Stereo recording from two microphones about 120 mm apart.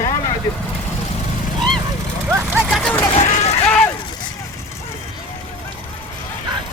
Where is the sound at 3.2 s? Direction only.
75° left (ahead or behind).